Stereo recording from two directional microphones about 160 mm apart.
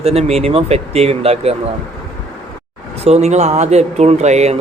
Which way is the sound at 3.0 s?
45° right (ahead or behind).